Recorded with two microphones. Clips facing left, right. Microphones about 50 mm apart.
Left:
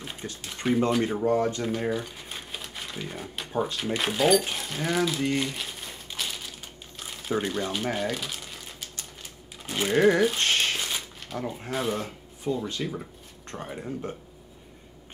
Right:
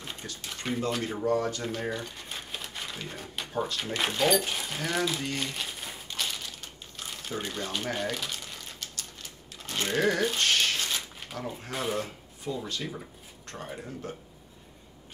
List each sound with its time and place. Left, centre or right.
0.2 s speech: left
1.6 s crumpling: centre
3.7 s speech: centre
5.4 s crumpling: centre
9.6 s speech: centre
10.4 s crumpling: left
10.8 s a sound: centre
11.3 s speech: left
11.7 s speech: centre
12.0 s speech: centre
13.6 s speech: centre